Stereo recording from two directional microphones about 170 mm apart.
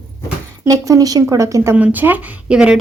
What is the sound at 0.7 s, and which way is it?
Speech, 20° right (ahead or behind).